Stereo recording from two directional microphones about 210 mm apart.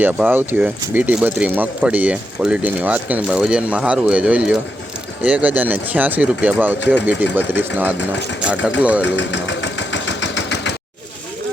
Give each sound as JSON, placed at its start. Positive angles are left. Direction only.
{"t": 0.0, "sound": "speech", "side_deg": -10}
{"t": 9.0, "sound": "engine", "side_deg": 60}